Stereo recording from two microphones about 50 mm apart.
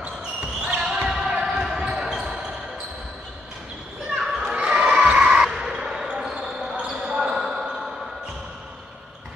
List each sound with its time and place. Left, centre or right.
0.0 s basketball bounce: right
0.7 s basketball bounce: centre
4.2 s children playing: centre
4.6 s basketball bounce: right; by 7.9 s centre